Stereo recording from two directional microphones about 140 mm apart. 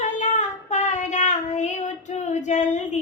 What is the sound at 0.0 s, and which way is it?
Child singing, 60° left (ahead or behind).